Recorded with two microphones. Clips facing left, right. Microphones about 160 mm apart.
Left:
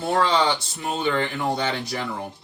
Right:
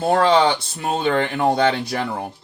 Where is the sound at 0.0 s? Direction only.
65° right (ahead or behind).